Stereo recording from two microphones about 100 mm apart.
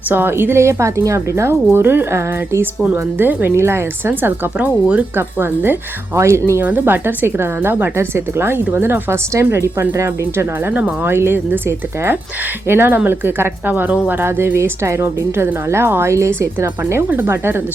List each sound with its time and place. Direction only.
0.1 s speech: 20° right (ahead or behind)
12.6 s speech: 25° right (ahead or behind)